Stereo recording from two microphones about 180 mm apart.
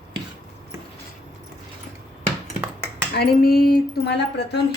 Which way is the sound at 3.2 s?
60° left (ahead or behind).